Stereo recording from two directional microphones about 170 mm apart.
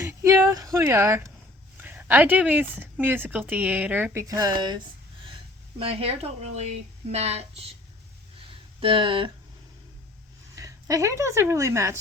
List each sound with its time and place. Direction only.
0.0 s a sound: 15° right (ahead or behind)
1.8 s speech: 10° right (ahead or behind); by 4.8 s 25° right (ahead or behind)
5.8 s speech: 35° right (ahead or behind)
8.8 s speech: 30° right (ahead or behind)
10.5 s speech: 20° right (ahead or behind)